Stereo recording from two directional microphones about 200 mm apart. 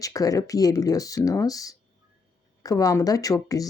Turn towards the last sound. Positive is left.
turn(degrees=15)  # may be behind; listen again after turning